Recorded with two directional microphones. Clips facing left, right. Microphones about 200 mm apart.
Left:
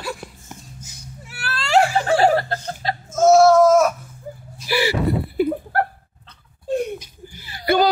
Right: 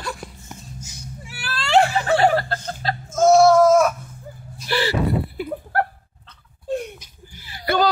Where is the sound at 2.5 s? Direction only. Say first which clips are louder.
Left 1 dB; 15° left (ahead or behind).